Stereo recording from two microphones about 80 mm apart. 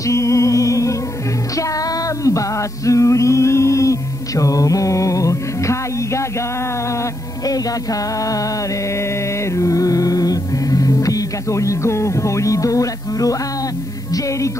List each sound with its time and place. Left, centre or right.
0.0 s music: left
2.2 s male singing: left
7.4 s music: left
9.6 s music: left